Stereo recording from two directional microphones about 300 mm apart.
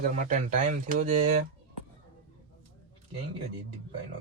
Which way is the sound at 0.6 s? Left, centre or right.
Right.